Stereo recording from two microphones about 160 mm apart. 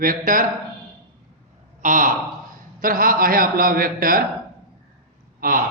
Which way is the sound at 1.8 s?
55° right (ahead or behind).